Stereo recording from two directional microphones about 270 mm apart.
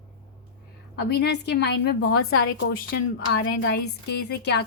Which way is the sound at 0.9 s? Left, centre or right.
Left.